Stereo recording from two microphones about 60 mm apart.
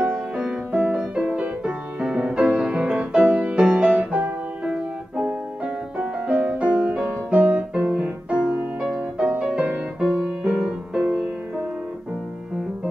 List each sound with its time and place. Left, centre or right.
0.0 s music: centre